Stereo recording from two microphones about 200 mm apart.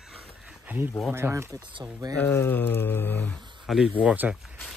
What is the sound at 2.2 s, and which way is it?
Speech, 10° left (ahead or behind).